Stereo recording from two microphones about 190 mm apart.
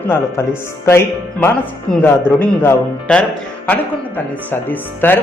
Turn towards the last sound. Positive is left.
turn(degrees=10)  # may be behind; listen again after turning